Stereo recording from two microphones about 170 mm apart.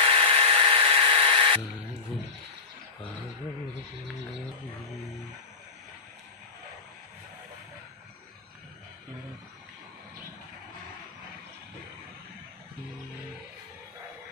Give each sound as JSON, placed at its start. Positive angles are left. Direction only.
{"t": 0.1, "sound": "electric toothbrush", "side_deg": -35}